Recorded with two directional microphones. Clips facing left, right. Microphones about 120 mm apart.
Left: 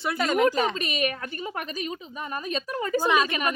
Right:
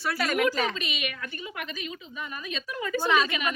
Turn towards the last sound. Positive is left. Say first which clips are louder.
# left 2 dB
turn(degrees=40)  # may be behind; listen again after turning